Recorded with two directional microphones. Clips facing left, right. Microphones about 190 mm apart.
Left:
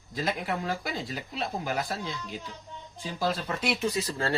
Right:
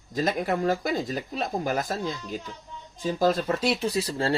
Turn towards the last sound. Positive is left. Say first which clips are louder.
# right 3 dB
turn(degrees=-30)  # may be behind; listen again after turning